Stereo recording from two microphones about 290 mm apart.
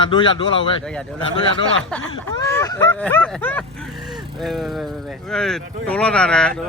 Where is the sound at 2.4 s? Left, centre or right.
Centre.